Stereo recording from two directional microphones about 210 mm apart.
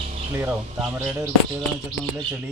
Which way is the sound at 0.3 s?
10° right (ahead or behind).